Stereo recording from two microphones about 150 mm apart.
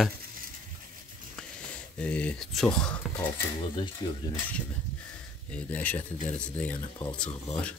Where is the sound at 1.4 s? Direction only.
5° left (ahead or behind).